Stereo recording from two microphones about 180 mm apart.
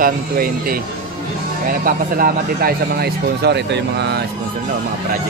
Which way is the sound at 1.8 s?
55° right (ahead or behind).